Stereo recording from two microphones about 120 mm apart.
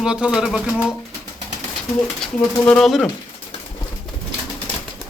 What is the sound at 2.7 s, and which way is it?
Speech, 5° left (ahead or behind).